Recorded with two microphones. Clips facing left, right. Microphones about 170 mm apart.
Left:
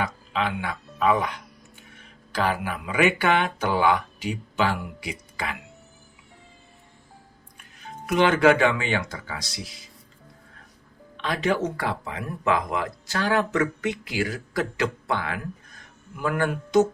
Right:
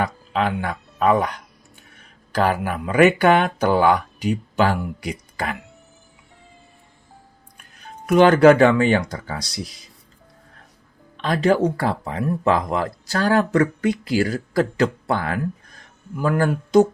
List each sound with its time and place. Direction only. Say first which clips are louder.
0.0 s speech: right 5 dB; 45° right (ahead or behind)
8.0 s speech: right 7 dB; 40° right (ahead or behind)
11.2 s speech: right 6 dB; 40° right (ahead or behind)